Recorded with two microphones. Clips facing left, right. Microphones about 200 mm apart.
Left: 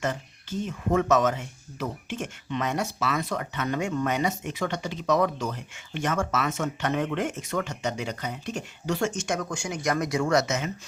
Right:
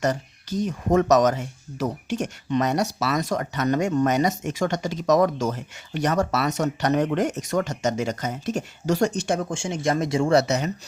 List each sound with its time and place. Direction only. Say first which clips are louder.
0.0 s speech: right 5 dB; 40° right (ahead or behind)